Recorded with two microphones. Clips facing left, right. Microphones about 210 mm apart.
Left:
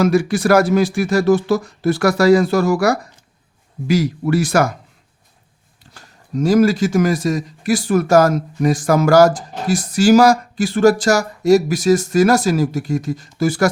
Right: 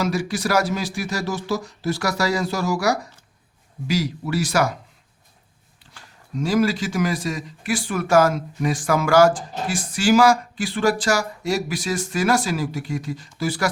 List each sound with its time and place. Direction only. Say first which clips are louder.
0.0 s speech: left 8 dB; 55° left (ahead or behind)
5.9 s speech: left 7 dB; 40° left (ahead or behind)